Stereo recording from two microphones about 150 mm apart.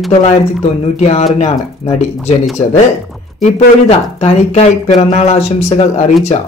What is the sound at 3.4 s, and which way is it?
Speech, 45° left (ahead or behind).